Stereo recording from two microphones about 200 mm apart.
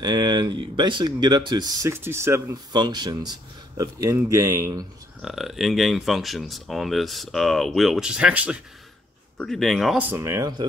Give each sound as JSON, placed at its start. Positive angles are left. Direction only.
{"t": 0.0, "sound": "speech", "side_deg": -20}
{"t": 5.2, "sound": "speech", "side_deg": 0}